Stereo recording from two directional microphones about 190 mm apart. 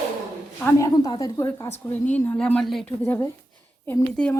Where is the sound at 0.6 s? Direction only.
15° left (ahead or behind).